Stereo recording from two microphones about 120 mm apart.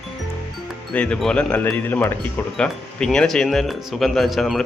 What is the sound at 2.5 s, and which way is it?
Speech, 5° left (ahead or behind).